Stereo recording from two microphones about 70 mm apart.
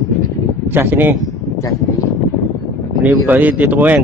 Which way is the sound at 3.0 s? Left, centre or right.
Right.